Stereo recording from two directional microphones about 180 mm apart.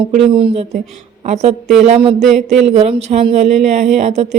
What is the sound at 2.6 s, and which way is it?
A woman's voice, 35° right (ahead or behind).